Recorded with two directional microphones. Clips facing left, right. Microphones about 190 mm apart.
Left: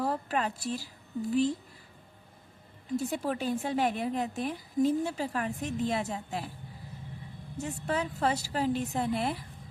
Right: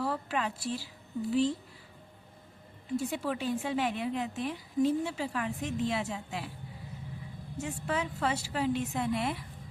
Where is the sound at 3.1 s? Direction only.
40° left (ahead or behind).